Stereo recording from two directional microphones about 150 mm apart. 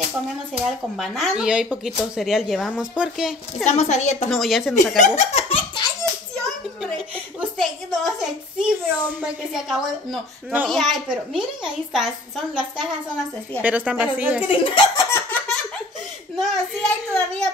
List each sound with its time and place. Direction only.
0.7 s speech: centre (ahead or behind)
3.6 s speech: 50° left (ahead or behind)
4.3 s speech: centre (ahead or behind)
5.0 s speech: 50° left (ahead or behind)
6.3 s a sound: 5° left (ahead or behind)
7.3 s a woman's voice: centre (ahead or behind)
14.5 s speech: 35° left (ahead or behind)
15.0 s laughter: 15° left (ahead or behind)
16.3 s speech: 5° left (ahead or behind)